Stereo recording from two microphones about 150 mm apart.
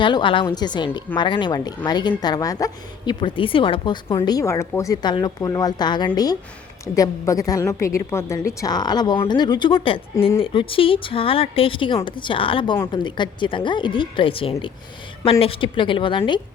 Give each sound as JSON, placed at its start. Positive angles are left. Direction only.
{"t": 0.0, "sound": "a woman's voice", "side_deg": 30}